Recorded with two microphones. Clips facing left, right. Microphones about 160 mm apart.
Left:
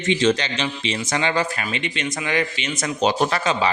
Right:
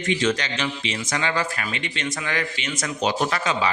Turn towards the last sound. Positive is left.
turn(degrees=30)  # may be behind; listen again after turning